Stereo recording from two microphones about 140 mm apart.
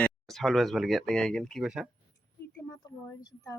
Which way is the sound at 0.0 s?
Centre (ahead or behind).